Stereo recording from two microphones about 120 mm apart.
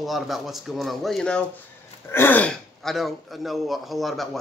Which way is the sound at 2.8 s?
Centre (ahead or behind).